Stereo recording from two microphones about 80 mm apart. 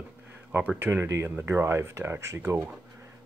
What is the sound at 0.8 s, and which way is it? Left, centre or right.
Speech, right.